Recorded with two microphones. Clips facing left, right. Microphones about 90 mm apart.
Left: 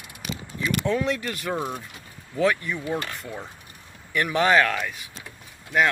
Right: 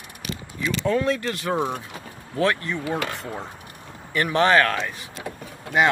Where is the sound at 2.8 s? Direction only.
70° right (ahead or behind).